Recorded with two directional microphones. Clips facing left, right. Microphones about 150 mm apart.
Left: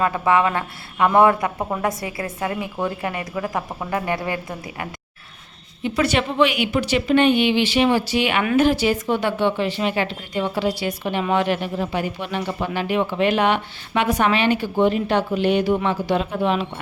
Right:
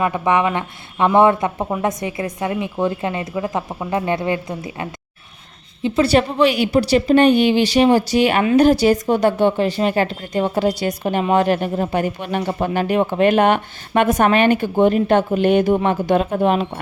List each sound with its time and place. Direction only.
0.0 s speech: 20° right (ahead or behind); by 16.8 s 45° right (ahead or behind)